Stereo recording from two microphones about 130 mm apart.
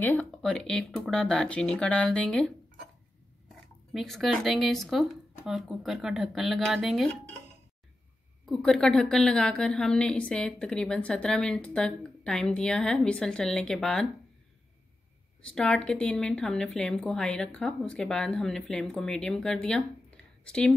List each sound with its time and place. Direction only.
0.0 s a woman's voice: 10° left (ahead or behind)
2.3 s a sound: 5° left (ahead or behind)
3.9 s speech: centre (ahead or behind)
8.5 s a woman's voice: centre (ahead or behind)
15.4 s speech: 5° left (ahead or behind)